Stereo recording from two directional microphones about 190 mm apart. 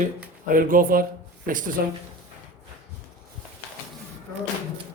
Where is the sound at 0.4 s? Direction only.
45° right (ahead or behind).